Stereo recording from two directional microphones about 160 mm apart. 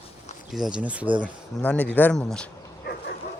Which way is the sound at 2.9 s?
75° left (ahead or behind).